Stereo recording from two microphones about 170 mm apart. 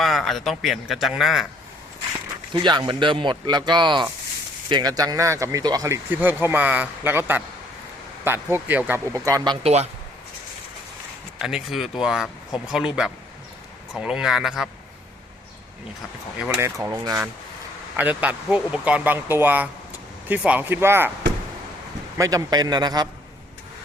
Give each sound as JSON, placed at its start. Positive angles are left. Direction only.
{"t": 0.0, "sound": "a man's voice", "side_deg": 0}
{"t": 2.5, "sound": "speech", "side_deg": -25}
{"t": 9.6, "sound": "speech", "side_deg": -40}
{"t": 11.3, "sound": "a man's voice", "side_deg": -5}
{"t": 16.4, "sound": "speech", "side_deg": -15}
{"t": 22.2, "sound": "speech", "side_deg": -20}